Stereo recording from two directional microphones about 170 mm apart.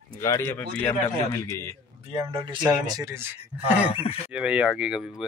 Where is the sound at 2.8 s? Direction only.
20° right (ahead or behind).